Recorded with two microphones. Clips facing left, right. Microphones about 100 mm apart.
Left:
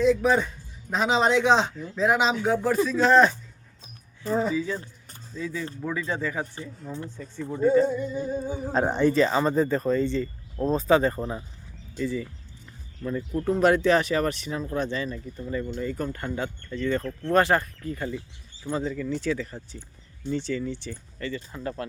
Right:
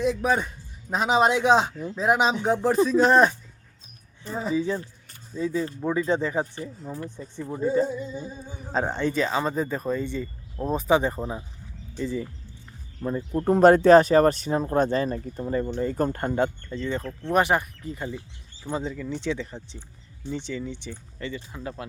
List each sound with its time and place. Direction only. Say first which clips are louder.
0.0 s speech: left 3 dB; 15° right (ahead or behind)
4.5 s speech: right 3 dB; 25° right (ahead or behind)
7.9 s a sound: left 4 dB; 5° right (ahead or behind)
8.2 s speech: left 9 dB; 55° left (ahead or behind)
8.9 s speech: left 4 dB; 15° left (ahead or behind)
9.1 s speech: left 3 dB; centre (ahead or behind)
11.9 s speech: even; 25° right (ahead or behind)
13.5 s speech: right 6 dB; 40° right (ahead or behind)
16.6 s speech: left 2 dB; 20° right (ahead or behind)
21.5 s speech: left 3 dB; 10° right (ahead or behind)